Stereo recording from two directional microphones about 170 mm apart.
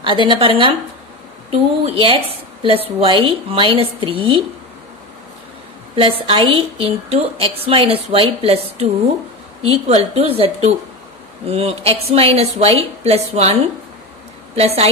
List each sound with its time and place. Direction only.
0.0 s a woman's voice: 30° right (ahead or behind)
5.9 s a woman's voice: 35° right (ahead or behind)